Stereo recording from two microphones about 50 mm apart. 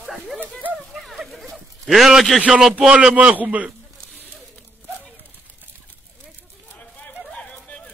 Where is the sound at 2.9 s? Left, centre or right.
Right.